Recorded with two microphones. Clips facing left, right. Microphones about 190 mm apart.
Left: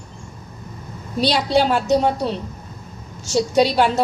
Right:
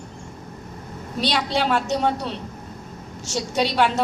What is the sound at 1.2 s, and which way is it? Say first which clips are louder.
A woman's voice: left 5 dB; 40° left (ahead or behind).